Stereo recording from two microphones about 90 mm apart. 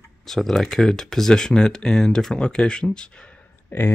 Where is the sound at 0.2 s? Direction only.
5° left (ahead or behind).